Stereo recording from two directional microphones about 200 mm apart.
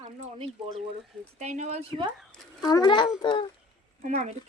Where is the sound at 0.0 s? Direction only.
25° right (ahead or behind).